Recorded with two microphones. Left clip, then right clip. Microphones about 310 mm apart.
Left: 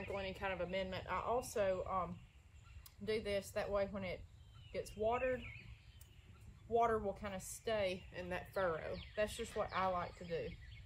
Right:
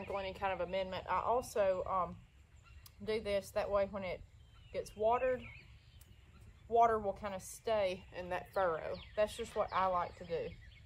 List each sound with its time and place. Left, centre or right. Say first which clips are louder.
0.0 s a woman's voice: right 4 dB; centre
6.7 s a woman's voice: right 5 dB; centre